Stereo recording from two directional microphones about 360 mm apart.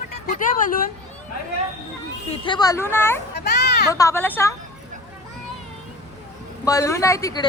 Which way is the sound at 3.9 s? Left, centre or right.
Centre.